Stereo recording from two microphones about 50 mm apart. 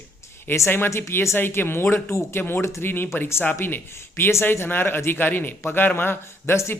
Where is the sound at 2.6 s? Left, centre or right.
Left.